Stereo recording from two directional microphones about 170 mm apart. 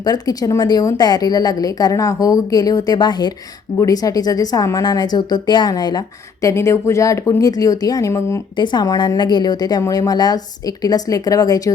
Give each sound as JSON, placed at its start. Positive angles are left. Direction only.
{"t": 0.0, "sound": "speech", "side_deg": 25}